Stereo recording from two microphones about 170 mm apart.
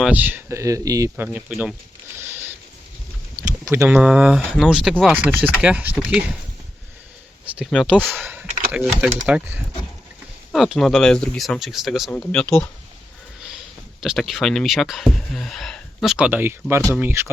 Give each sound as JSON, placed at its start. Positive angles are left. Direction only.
{"t": 0.0, "sound": "speech", "side_deg": -10}
{"t": 1.1, "sound": "speech", "side_deg": -10}
{"t": 3.7, "sound": "speech", "side_deg": -15}
{"t": 3.9, "sound": "speech", "side_deg": -5}
{"t": 7.5, "sound": "speech", "side_deg": 0}
{"t": 10.5, "sound": "speech", "side_deg": 0}
{"t": 14.0, "sound": "speech", "side_deg": 0}